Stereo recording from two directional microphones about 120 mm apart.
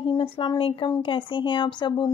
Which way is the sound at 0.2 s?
40° left (ahead or behind).